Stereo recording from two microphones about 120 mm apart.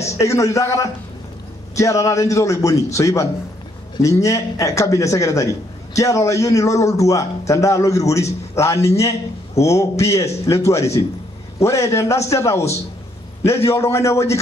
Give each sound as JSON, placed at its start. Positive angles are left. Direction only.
{"t": 0.0, "sound": "a man's voice", "side_deg": 25}